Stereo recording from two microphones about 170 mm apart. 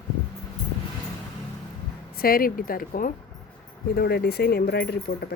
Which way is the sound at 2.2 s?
60° left (ahead or behind).